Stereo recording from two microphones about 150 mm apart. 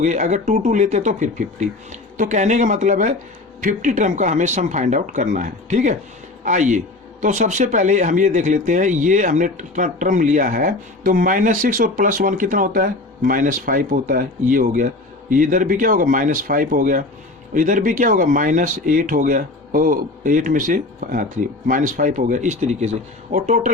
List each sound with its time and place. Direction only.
0.0 s speech: 55° right (ahead or behind)